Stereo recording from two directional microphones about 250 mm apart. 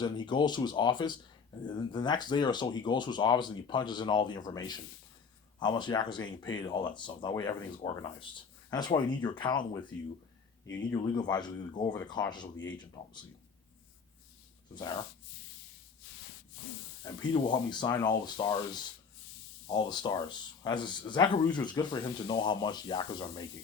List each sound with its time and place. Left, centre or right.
0.0 s speech: centre
10.9 s speech: centre
14.8 s speech: centre
17.0 s speech: centre